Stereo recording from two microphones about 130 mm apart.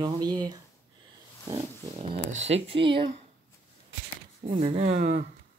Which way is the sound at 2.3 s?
60° right (ahead or behind).